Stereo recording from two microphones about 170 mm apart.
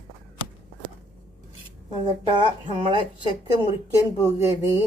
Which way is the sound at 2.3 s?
30° right (ahead or behind).